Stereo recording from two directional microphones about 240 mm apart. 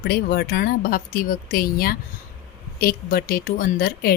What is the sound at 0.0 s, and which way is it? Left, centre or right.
Speech, left.